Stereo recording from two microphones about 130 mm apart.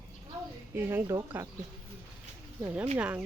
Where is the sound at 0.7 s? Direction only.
20° right (ahead or behind).